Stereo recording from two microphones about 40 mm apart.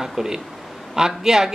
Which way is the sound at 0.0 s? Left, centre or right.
Centre.